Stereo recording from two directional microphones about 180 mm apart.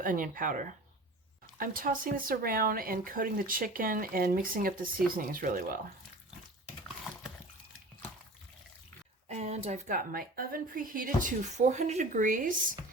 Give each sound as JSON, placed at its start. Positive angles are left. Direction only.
{"t": 0.0, "sound": "speech", "side_deg": -50}
{"t": 9.3, "sound": "speech", "side_deg": -40}